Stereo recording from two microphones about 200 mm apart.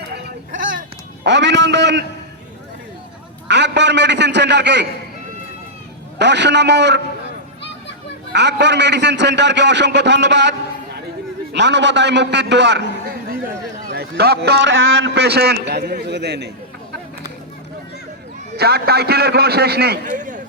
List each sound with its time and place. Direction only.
1.2 s a man's voice: 60° right (ahead or behind)
3.5 s a man's voice: 60° right (ahead or behind)
6.1 s a man's voice: 60° right (ahead or behind)
8.3 s a man's voice: 60° right (ahead or behind)
11.5 s a man's voice: 60° right (ahead or behind)
18.5 s a man's voice: 50° right (ahead or behind)